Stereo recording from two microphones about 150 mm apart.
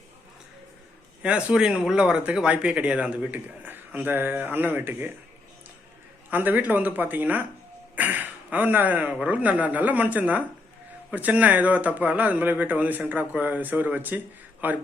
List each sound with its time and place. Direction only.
1.2 s speech: 5° right (ahead or behind)
6.3 s speech: 10° right (ahead or behind)